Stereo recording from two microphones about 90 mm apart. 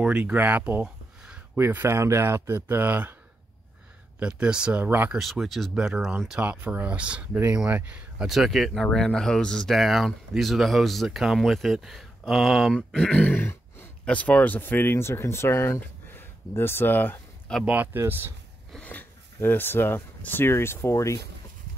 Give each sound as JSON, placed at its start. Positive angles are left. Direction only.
{"t": 0.0, "sound": "speech", "side_deg": -15}
{"t": 1.2, "sound": "a sound", "side_deg": -10}
{"t": 1.6, "sound": "speech", "side_deg": -25}
{"t": 4.2, "sound": "speech", "side_deg": -10}
{"t": 4.8, "sound": "speech", "side_deg": -20}
{"t": 5.1, "sound": "speech", "side_deg": 0}
{"t": 6.5, "sound": "speech", "side_deg": -20}
{"t": 8.3, "sound": "speech", "side_deg": 0}
{"t": 12.7, "sound": "speech", "side_deg": 5}
{"t": 17.6, "sound": "speech", "side_deg": -20}
{"t": 18.9, "sound": "speech", "side_deg": 20}